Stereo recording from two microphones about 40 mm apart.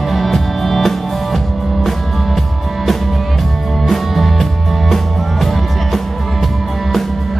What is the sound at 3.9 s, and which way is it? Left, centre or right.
Music, centre.